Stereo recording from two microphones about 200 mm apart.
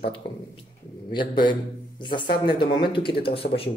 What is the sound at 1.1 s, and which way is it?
Mantra, 25° left (ahead or behind).